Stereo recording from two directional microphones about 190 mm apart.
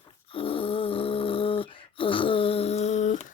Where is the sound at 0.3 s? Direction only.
30° left (ahead or behind).